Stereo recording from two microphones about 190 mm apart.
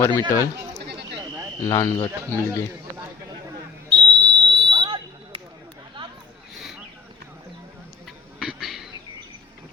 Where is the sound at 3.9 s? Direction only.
60° right (ahead or behind).